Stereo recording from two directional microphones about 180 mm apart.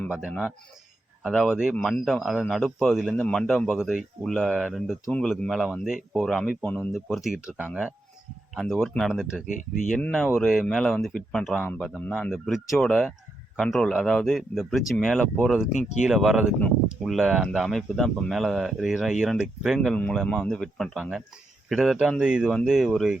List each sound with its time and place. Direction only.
0.1 s speech: 5° right (ahead or behind)
9.5 s speech: 45° left (ahead or behind)
10.1 s speech: 5° left (ahead or behind)